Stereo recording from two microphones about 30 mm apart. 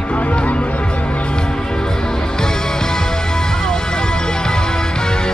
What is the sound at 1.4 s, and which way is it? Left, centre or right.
Music, left.